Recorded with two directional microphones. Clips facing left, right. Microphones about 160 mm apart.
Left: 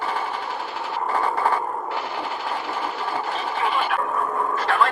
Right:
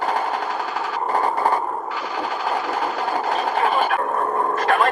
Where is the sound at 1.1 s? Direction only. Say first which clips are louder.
Right 2 dB; 40° right (ahead or behind).